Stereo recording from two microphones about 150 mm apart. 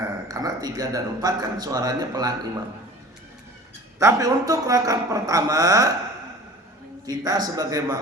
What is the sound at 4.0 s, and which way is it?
A man's voice, 20° right (ahead or behind).